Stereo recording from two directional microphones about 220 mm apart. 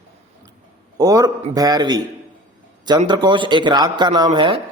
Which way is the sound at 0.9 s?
15° right (ahead or behind).